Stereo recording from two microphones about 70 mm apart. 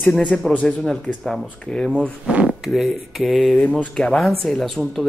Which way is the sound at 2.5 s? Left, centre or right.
Centre.